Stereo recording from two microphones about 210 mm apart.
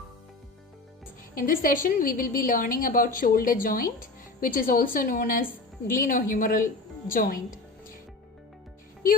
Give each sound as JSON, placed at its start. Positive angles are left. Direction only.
{"t": 1.4, "sound": "a woman's voice", "side_deg": 40}